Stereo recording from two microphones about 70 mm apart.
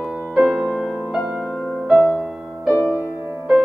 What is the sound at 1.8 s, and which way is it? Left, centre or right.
Music, centre.